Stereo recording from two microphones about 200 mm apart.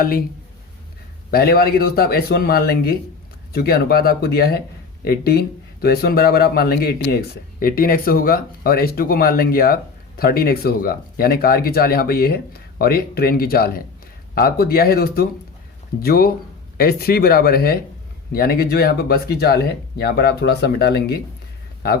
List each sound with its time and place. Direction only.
0.0 s speech: 45° left (ahead or behind)
1.3 s speech: 50° left (ahead or behind)